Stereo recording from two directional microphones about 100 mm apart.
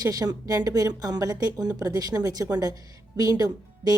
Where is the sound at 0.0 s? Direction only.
40° right (ahead or behind).